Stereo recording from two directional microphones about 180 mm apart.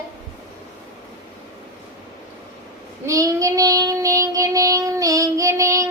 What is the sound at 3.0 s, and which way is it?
Child singing, 20° right (ahead or behind).